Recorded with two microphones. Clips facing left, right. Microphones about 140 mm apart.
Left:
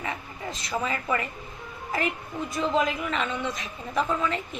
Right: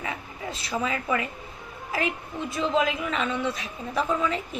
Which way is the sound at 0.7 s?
5° right (ahead or behind).